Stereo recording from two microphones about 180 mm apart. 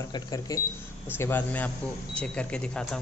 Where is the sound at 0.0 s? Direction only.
20° left (ahead or behind).